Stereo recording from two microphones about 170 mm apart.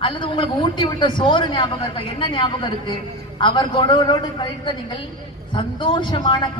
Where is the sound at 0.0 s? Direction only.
30° left (ahead or behind).